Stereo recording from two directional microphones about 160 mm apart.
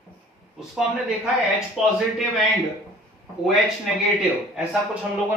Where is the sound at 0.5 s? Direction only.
5° right (ahead or behind).